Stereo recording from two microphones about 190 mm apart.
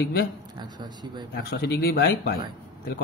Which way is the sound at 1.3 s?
55° left (ahead or behind).